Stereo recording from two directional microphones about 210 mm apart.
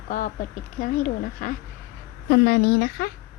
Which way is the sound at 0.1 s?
40° left (ahead or behind).